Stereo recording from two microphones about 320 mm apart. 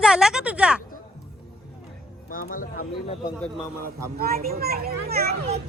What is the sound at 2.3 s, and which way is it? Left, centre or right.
Speech, left.